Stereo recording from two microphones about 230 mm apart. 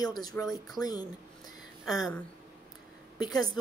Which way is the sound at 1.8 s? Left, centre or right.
Centre.